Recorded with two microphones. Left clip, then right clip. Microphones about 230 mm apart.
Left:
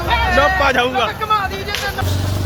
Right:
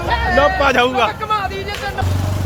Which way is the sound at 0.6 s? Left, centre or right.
Right.